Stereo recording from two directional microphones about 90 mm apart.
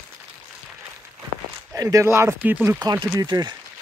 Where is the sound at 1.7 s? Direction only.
40° right (ahead or behind).